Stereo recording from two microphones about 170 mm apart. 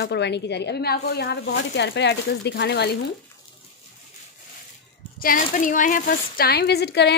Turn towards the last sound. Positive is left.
turn(degrees=75)  # may be behind; listen again after turning